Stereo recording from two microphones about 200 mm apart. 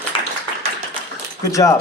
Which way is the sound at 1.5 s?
15° left (ahead or behind).